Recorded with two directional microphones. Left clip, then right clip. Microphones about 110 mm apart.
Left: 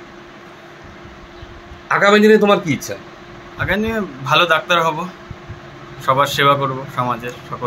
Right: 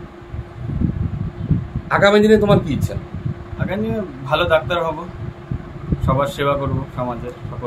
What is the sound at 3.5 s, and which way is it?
A man's voice, 5° left (ahead or behind).